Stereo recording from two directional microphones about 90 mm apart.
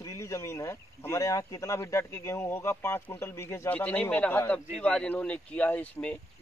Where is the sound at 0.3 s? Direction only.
35° left (ahead or behind).